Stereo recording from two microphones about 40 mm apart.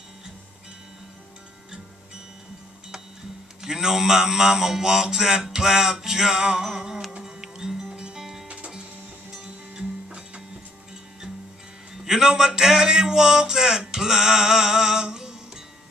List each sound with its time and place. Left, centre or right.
3.6 s mantra: centre
7.2 s music: centre
8.5 s music: right
12.0 s a man's voice: centre